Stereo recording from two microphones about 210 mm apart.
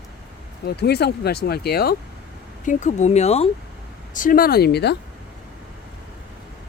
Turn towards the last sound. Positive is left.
turn(degrees=50)  # may be behind; listen again after turning